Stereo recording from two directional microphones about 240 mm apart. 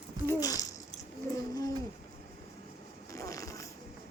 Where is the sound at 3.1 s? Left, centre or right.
Centre.